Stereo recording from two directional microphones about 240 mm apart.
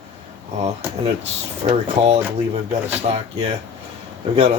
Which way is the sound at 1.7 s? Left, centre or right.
Right.